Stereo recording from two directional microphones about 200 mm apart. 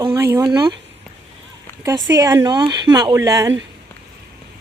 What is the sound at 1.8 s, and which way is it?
Speech, 15° right (ahead or behind).